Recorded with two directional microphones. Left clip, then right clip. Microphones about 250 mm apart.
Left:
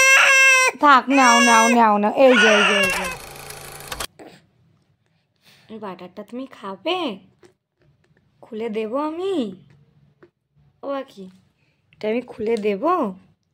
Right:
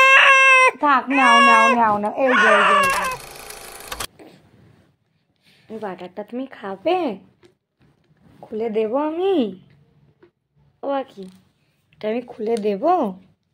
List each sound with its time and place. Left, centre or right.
0.0 s baby cry: left
1.8 s speech: left
3.1 s vehicle: centre
5.4 s speech: left
10.8 s speech: centre